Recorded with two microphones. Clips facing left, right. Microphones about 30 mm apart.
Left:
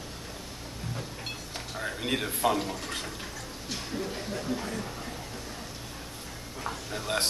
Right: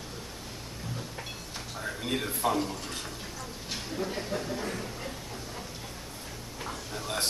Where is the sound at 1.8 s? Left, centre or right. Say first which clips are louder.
Left 2 dB; centre.